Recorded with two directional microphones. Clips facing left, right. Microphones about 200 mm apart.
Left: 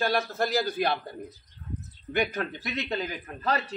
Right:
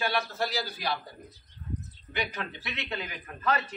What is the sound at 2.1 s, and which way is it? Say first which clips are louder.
Speech: left 6 dB; 50° left (ahead or behind).